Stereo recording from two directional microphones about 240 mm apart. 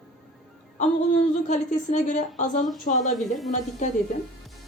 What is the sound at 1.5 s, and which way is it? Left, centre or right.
A woman's voice, left.